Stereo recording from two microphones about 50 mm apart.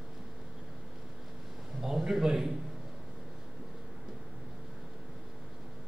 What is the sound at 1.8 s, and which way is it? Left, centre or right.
Speech, centre.